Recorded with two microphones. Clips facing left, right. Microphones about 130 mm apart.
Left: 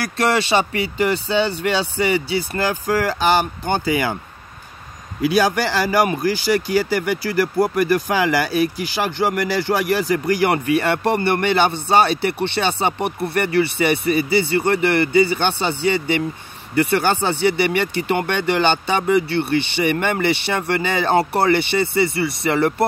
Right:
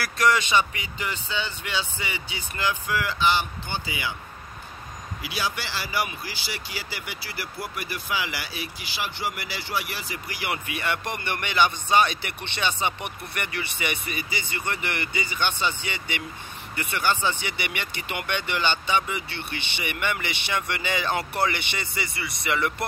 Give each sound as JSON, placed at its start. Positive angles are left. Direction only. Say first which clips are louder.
{"t": 0.0, "sound": "speech", "louder": "left 4 dB", "side_deg": 30}
{"t": 5.2, "sound": "speech", "louder": "left 14 dB", "side_deg": 50}